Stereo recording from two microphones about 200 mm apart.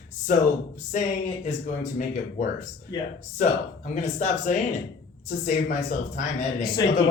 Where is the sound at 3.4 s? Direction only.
40° left (ahead or behind).